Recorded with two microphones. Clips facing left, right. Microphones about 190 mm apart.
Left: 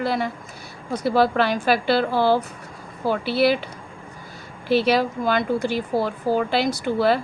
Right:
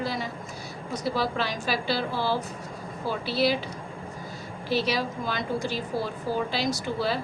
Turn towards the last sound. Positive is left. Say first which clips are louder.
# left 8 dB
turn(degrees=60)  # may be behind; listen again after turning